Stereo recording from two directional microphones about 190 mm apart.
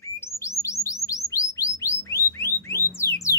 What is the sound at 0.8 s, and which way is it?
Bird, 15° left (ahead or behind).